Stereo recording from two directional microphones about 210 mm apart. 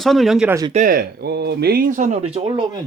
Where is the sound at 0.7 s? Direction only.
40° right (ahead or behind); by 2.8 s 25° right (ahead or behind).